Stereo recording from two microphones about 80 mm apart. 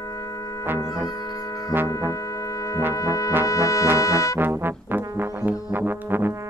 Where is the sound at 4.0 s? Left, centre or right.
Left.